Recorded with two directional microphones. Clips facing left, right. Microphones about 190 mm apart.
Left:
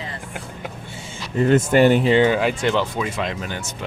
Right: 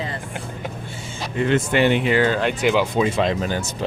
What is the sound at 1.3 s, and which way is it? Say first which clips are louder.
Speech: left 4 dB; 40° left (ahead or behind).